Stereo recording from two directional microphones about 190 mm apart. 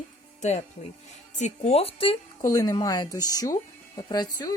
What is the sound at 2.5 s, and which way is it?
Speech, 15° left (ahead or behind).